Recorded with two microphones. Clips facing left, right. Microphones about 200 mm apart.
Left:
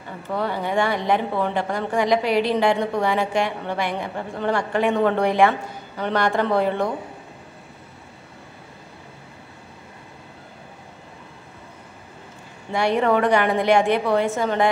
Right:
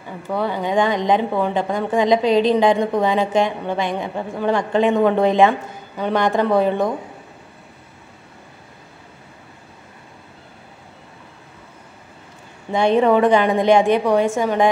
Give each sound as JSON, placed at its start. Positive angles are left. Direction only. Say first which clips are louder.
{"t": 0.3, "sound": "a woman's voice", "louder": "right 3 dB", "side_deg": -15}
{"t": 12.7, "sound": "a woman's voice", "louder": "right 4 dB", "side_deg": -20}